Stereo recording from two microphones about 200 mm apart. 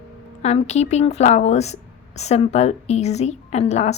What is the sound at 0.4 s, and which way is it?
Speech, 35° left (ahead or behind).